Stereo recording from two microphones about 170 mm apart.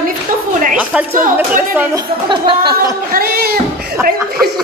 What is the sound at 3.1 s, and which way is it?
Speech, 60° right (ahead or behind).